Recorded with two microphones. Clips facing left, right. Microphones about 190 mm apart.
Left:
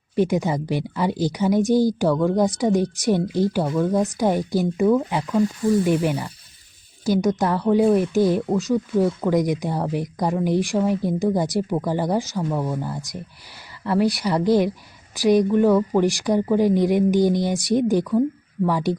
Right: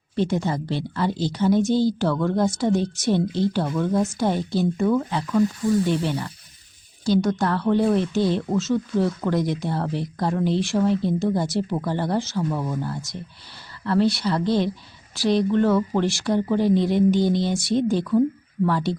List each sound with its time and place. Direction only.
0.2 s speech: 15° left (ahead or behind)